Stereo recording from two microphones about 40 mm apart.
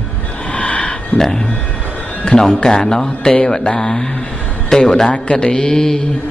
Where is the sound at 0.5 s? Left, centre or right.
Left.